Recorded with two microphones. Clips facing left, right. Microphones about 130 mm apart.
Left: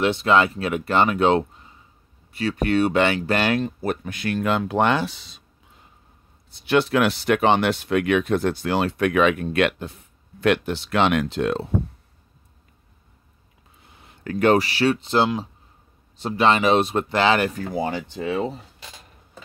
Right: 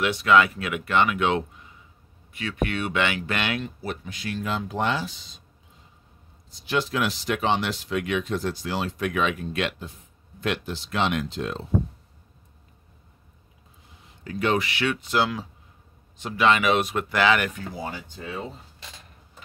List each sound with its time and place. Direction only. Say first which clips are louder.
0.0 s speech: left 1 dB; 30° left (ahead or behind); by 5.4 s 65° left (ahead or behind)
6.5 s speech: left 7 dB; 65° left (ahead or behind)
13.8 s a sound: left 6 dB; 60° left (ahead or behind)
14.6 s speech: left 6 dB; 35° left (ahead or behind)
17.7 s speech: left 9 dB; 80° left